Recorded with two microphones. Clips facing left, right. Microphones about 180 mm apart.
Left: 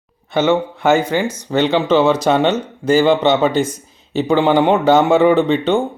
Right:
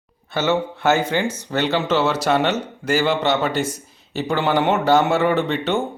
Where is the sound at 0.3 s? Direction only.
15° left (ahead or behind).